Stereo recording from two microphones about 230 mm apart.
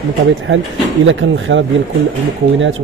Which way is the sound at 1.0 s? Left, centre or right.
Right.